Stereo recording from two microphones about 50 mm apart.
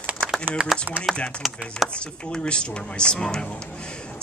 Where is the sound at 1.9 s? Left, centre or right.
Centre.